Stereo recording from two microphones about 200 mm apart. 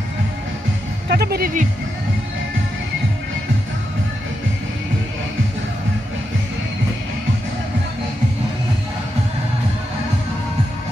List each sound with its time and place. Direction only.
1.0 s speech: 50° right (ahead or behind)